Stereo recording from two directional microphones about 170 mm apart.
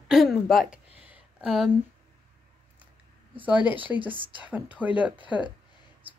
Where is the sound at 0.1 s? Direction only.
Centre (ahead or behind).